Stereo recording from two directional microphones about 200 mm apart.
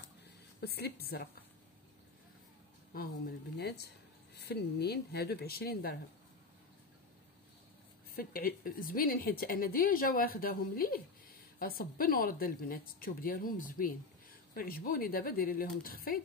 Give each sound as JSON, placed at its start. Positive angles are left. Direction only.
{"t": 0.6, "sound": "a woman's voice", "side_deg": 55}
{"t": 2.9, "sound": "a woman's voice", "side_deg": 45}
{"t": 8.1, "sound": "a woman's voice", "side_deg": 45}